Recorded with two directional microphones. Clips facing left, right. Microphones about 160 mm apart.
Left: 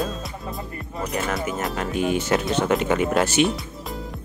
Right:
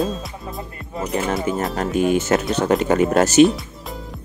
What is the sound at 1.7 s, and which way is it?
Speech, 40° right (ahead or behind).